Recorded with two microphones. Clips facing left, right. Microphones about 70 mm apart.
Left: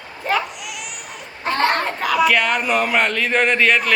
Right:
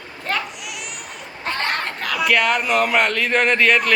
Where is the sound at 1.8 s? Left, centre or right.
Centre.